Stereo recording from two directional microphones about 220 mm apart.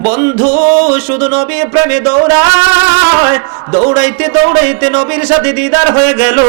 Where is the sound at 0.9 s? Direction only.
10° right (ahead or behind).